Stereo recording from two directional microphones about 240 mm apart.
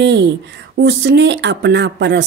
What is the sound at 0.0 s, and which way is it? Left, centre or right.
Speech, right.